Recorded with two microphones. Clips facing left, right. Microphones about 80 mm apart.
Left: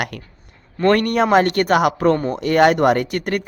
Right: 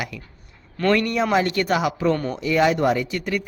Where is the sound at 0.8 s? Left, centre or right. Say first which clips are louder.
Left 4 dB; left.